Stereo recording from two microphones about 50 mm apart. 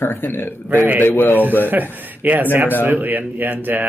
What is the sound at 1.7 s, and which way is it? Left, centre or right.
Speech, right.